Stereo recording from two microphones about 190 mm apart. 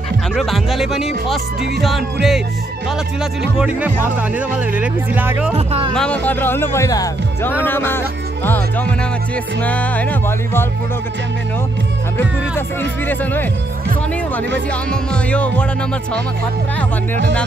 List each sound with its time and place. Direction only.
0.4 s speech: centre (ahead or behind)
3.5 s speech: 5° right (ahead or behind)
5.7 s speech: 30° right (ahead or behind)
5.9 s speech: 5° left (ahead or behind)
13.1 s speech: 10° left (ahead or behind)
14.9 s speech: 5° left (ahead or behind)